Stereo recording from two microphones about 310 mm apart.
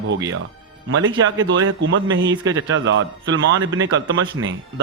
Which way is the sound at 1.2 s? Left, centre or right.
Right.